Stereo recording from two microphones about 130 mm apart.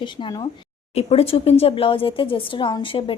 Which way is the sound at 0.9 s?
50° left (ahead or behind).